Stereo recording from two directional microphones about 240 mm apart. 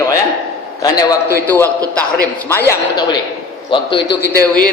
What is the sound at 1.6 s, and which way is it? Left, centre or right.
Speech, centre.